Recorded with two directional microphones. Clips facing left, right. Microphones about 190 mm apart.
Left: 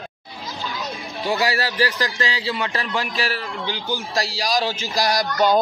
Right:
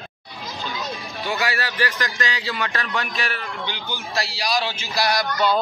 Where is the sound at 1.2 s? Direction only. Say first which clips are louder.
Left 4 dB; 35° left (ahead or behind).